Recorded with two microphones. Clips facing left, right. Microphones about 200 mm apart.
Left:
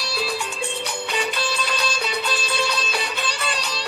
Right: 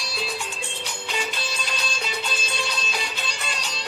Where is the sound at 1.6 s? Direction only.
65° left (ahead or behind).